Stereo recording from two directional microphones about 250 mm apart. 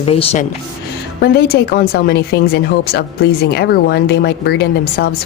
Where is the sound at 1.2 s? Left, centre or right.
Left.